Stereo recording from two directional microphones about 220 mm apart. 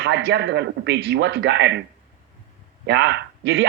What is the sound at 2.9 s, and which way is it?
Speech, 50° right (ahead or behind).